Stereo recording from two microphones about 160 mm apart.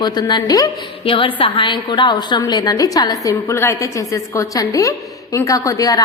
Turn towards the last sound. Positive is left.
turn(degrees=20)  # may be behind; listen again after turning